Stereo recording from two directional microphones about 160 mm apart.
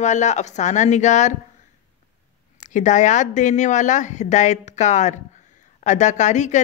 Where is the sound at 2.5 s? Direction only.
50° left (ahead or behind).